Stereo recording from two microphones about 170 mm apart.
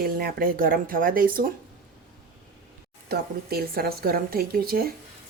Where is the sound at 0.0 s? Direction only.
60° right (ahead or behind).